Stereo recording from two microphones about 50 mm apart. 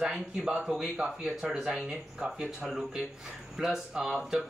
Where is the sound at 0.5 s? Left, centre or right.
Right.